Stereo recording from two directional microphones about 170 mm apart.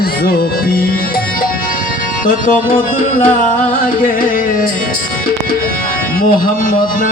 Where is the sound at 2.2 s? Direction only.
55° left (ahead or behind).